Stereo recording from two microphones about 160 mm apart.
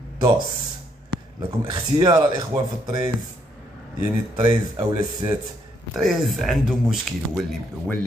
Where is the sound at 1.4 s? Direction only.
30° right (ahead or behind).